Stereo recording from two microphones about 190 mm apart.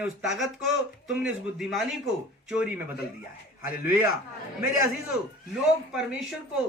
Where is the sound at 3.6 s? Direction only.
45° left (ahead or behind).